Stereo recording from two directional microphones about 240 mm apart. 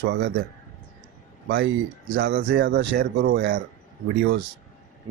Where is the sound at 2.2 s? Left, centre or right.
Right.